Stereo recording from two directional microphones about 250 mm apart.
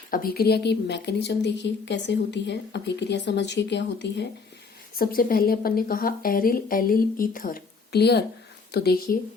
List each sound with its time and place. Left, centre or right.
0.1 s a woman's voice: left